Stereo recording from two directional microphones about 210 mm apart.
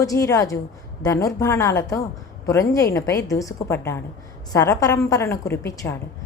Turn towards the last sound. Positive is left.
turn(degrees=15)  # may be behind; listen again after turning